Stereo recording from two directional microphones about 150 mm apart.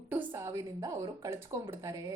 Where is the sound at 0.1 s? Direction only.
15° right (ahead or behind).